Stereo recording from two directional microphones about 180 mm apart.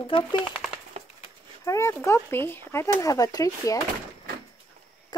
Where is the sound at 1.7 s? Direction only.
15° left (ahead or behind).